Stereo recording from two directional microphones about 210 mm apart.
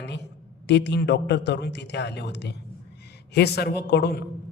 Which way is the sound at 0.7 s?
55° left (ahead or behind).